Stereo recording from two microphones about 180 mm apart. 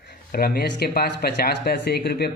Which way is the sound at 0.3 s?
55° left (ahead or behind).